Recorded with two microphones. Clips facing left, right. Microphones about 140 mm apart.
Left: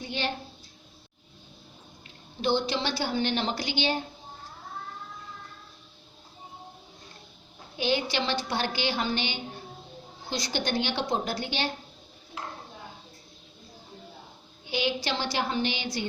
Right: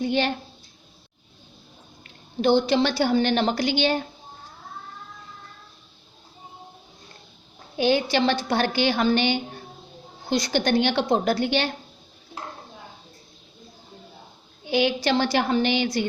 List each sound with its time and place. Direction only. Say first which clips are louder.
0.0 s a woman's voice: right 9 dB; 60° right (ahead or behind)
2.4 s a woman's voice: right 8 dB; 55° right (ahead or behind)
7.8 s a woman's voice: right 7 dB; 50° right (ahead or behind)
14.7 s a woman's voice: right 8 dB; 60° right (ahead or behind)